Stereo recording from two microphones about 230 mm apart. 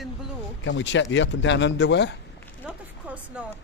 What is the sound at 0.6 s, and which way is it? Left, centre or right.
Speech, left.